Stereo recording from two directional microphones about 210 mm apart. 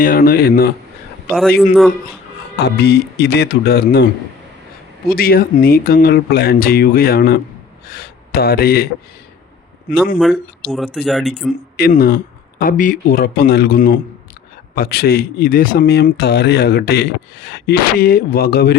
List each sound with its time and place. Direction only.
0.0 s speech: 45° left (ahead or behind)
1.4 s speech: centre (ahead or behind)
2.6 s speech: 50° left (ahead or behind)
5.0 s speech: 45° left (ahead or behind)
10.2 s speech: centre (ahead or behind)
11.8 s speech: 45° left (ahead or behind)